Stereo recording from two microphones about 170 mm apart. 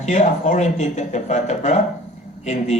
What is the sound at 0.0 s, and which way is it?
Speech, 45° left (ahead or behind).